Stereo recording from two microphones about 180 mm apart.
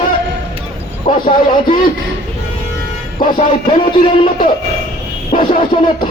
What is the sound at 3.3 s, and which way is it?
Speech, 30° left (ahead or behind).